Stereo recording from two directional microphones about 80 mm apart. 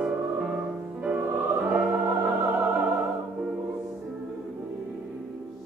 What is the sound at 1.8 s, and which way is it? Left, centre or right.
Music, centre.